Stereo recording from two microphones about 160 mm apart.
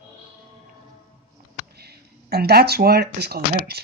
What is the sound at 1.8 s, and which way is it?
Speech, 80° right.